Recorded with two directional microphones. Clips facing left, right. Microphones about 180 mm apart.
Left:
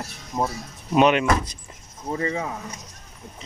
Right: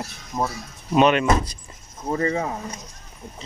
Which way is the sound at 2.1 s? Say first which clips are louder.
Right 3 dB; 45° right (ahead or behind).